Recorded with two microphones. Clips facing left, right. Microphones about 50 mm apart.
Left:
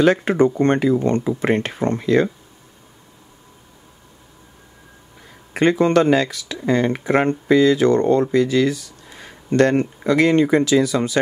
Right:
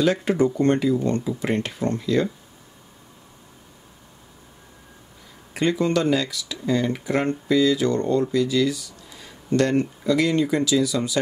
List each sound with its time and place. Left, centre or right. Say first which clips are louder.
0.0 s speech: left 5 dB; left
5.5 s speech: left 6 dB; left